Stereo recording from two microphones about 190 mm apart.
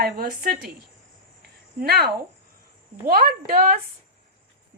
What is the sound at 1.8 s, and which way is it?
Speech, 55° right (ahead or behind).